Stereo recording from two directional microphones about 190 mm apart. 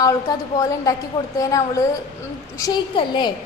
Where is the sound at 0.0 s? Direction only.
20° left (ahead or behind).